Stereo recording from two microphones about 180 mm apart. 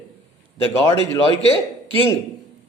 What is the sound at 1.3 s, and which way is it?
Speech, 35° left (ahead or behind).